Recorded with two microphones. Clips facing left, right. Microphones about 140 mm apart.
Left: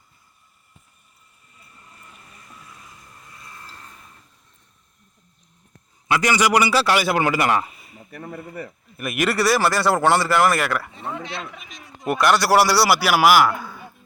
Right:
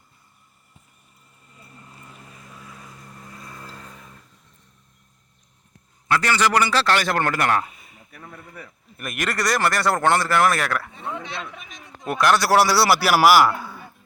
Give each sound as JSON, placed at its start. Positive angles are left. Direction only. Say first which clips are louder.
{"t": 6.1, "sound": "a man's voice", "louder": "left 2 dB", "side_deg": 15}
{"t": 8.1, "sound": "speech", "louder": "left 8 dB", "side_deg": 65}
{"t": 9.0, "sound": "a man's voice", "louder": "left 5 dB", "side_deg": 10}